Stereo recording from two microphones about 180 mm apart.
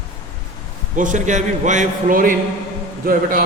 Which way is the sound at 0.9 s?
45° right (ahead or behind).